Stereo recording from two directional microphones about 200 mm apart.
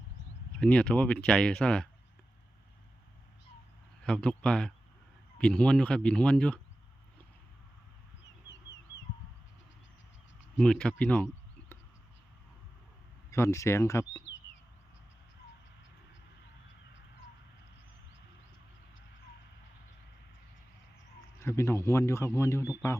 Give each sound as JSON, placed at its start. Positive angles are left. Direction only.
{"t": 0.6, "sound": "speech", "side_deg": 5}
{"t": 4.0, "sound": "speech", "side_deg": 5}
{"t": 8.4, "sound": "bird", "side_deg": 65}
{"t": 10.6, "sound": "speech", "side_deg": 5}
{"t": 13.3, "sound": "a man's voice", "side_deg": 15}
{"t": 21.3, "sound": "a man's voice", "side_deg": 15}